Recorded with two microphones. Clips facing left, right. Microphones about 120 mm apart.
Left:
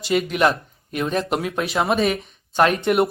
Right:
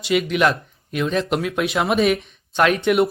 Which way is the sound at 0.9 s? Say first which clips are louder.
Right 1 dB; 45° left (ahead or behind).